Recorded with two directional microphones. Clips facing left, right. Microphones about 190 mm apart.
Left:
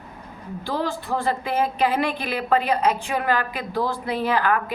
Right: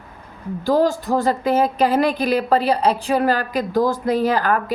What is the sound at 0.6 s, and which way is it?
Speech, 40° right (ahead or behind).